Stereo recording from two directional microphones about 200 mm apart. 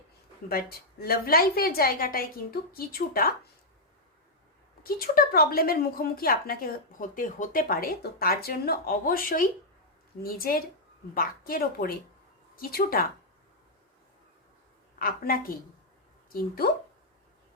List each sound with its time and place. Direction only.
0.4 s a woman's voice: 50° left (ahead or behind)
4.8 s a woman's voice: 45° left (ahead or behind)
14.9 s a woman's voice: 45° left (ahead or behind)